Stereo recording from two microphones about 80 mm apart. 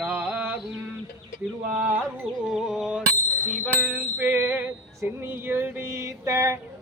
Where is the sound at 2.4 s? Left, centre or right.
Centre.